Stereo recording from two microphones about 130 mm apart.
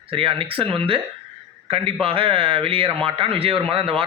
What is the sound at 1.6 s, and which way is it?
A man's voice, 45° right (ahead or behind).